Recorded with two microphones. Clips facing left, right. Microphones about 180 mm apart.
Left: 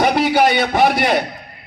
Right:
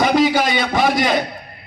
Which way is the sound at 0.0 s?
65° left (ahead or behind).